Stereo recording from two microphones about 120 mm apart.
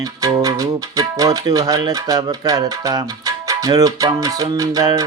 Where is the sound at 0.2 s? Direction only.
30° right (ahead or behind).